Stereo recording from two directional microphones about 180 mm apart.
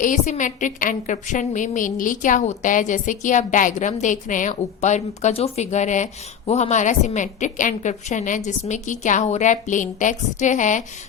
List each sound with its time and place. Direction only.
0.0 s a woman's voice: 45° left (ahead or behind)